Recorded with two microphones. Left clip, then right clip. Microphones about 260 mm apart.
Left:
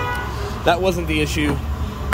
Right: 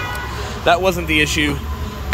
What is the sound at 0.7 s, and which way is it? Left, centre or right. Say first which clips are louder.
Speech: right 3 dB; centre.